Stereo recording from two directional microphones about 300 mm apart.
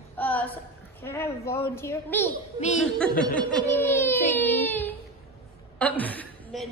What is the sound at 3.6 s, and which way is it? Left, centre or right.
Speech, centre.